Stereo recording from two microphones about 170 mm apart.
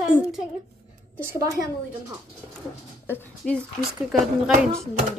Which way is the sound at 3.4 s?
Centre (ahead or behind).